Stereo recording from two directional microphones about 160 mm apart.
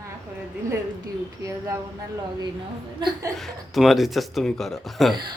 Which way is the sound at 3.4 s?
Centre (ahead or behind).